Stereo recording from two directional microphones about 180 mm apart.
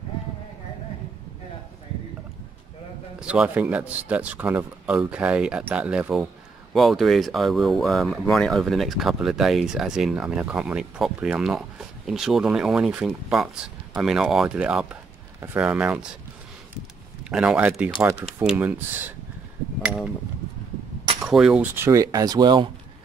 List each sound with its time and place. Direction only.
3.2 s speech: 5° right (ahead or behind)
16.7 s a sound: 5° right (ahead or behind)
18.4 s speech: 5° right (ahead or behind)
21.2 s speech: 5° right (ahead or behind)
21.7 s speech: 15° right (ahead or behind)